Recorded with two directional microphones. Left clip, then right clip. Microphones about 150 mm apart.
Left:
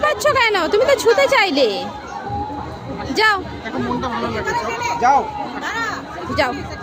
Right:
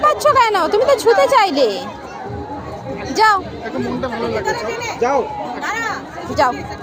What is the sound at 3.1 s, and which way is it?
Speech, 15° left (ahead or behind).